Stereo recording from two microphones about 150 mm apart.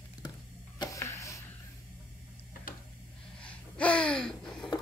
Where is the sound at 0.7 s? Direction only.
25° left (ahead or behind).